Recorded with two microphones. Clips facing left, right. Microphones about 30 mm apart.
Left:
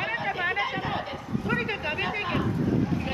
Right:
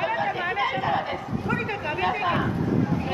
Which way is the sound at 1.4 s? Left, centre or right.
Centre.